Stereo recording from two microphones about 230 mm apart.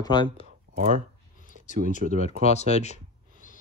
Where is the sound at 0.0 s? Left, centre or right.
Centre.